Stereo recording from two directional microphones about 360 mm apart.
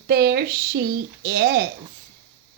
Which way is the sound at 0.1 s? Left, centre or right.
Right.